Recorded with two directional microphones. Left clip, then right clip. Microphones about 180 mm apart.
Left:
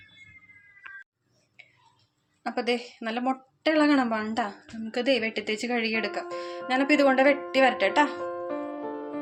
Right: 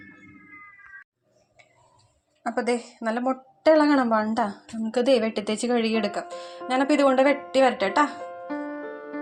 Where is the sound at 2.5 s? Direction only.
15° right (ahead or behind).